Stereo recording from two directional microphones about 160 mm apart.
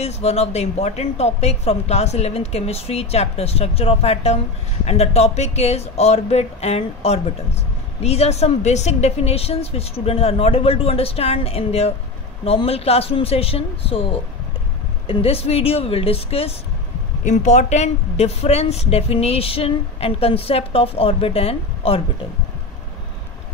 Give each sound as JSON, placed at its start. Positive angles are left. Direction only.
{"t": 0.0, "sound": "a woman's voice", "side_deg": 40}
{"t": 15.0, "sound": "a woman's voice", "side_deg": 35}
{"t": 17.2, "sound": "a woman's voice", "side_deg": 50}